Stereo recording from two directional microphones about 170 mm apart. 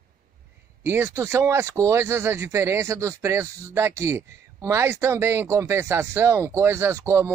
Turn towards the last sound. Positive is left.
turn(degrees=-15)  # may be behind; listen again after turning